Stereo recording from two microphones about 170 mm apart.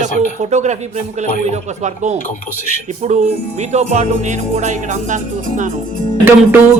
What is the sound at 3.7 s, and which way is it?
Music, 40° right (ahead or behind).